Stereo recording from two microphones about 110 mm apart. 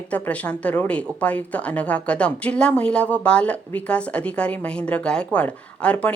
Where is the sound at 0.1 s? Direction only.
10° left (ahead or behind).